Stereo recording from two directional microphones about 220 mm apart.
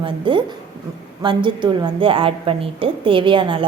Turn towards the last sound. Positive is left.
turn(degrees=-20)  # may be behind; listen again after turning